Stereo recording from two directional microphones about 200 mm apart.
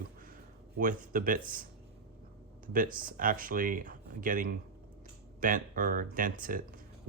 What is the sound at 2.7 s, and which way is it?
Speech, 45° right (ahead or behind).